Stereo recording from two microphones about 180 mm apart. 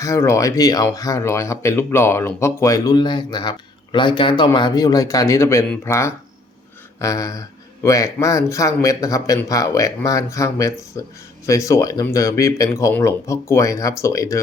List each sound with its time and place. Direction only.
0.0 s speech: 15° left (ahead or behind)
5.6 s speech: 5° left (ahead or behind)